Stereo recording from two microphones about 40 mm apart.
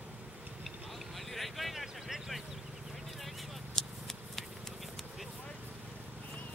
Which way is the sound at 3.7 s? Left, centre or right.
Centre.